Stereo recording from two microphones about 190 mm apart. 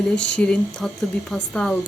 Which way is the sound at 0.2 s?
5° left (ahead or behind).